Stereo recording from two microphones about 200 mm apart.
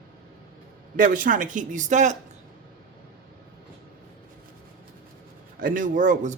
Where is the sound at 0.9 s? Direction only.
40° right (ahead or behind).